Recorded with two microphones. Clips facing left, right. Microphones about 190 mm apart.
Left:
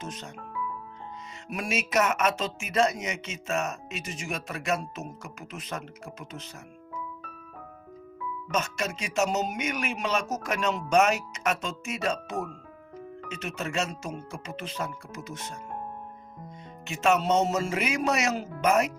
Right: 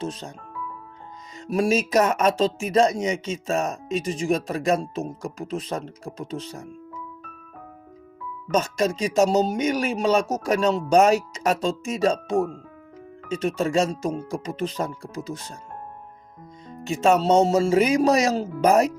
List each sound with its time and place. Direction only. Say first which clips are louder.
0.0 s speech: right 8 dB; 30° right (ahead or behind)
1.5 s speech: right 10 dB; 35° right (ahead or behind)
8.4 s speech: right 8 dB; 35° right (ahead or behind)
16.8 s speech: right 5 dB; 35° right (ahead or behind)